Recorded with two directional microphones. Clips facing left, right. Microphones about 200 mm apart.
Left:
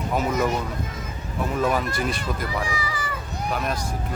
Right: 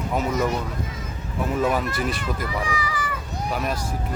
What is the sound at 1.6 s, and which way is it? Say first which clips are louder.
Speech: even; 5° right (ahead or behind).